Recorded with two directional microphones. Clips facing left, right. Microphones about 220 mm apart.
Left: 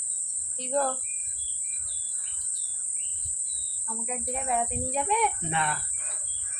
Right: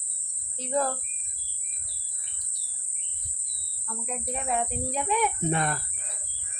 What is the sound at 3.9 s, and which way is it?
Speech, 5° left (ahead or behind).